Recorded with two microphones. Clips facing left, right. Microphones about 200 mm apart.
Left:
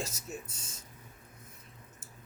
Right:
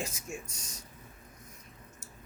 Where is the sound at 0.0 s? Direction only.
90° right.